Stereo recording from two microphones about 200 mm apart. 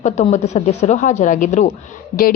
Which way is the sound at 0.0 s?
35° left (ahead or behind).